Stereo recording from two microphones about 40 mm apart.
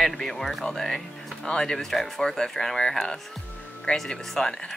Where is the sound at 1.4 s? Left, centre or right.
Centre.